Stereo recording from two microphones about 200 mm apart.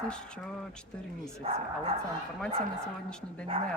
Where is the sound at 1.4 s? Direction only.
30° right (ahead or behind).